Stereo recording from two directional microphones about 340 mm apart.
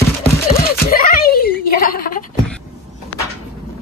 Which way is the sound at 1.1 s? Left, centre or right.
Left.